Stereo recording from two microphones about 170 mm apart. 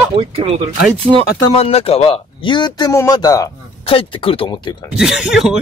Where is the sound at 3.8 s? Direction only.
30° left (ahead or behind).